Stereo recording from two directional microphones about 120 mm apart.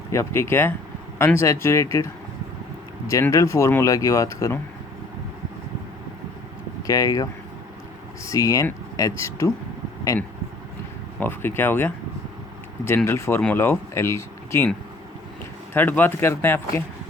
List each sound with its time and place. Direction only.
0.1 s speech: 20° left (ahead or behind)
3.1 s speech: 25° left (ahead or behind)
6.8 s speech: 30° left (ahead or behind)
11.2 s speech: 15° left (ahead or behind)
13.1 s speech: 20° left (ahead or behind)
15.7 s speech: 15° left (ahead or behind)